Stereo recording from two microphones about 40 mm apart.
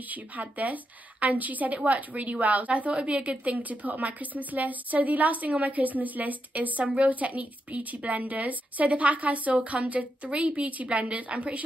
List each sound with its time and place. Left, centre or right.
0.1 s a woman's voice: right